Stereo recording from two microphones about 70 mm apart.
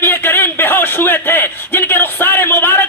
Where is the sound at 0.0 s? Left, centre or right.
Left.